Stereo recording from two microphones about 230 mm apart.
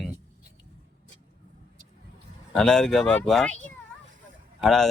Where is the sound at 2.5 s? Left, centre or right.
Centre.